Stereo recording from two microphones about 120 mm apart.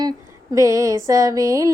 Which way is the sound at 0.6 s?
25° right (ahead or behind).